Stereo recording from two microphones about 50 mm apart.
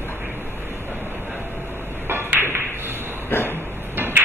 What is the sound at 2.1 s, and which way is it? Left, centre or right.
Ping, right.